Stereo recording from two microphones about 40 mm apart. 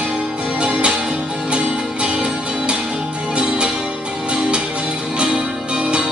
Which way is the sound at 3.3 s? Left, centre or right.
Right.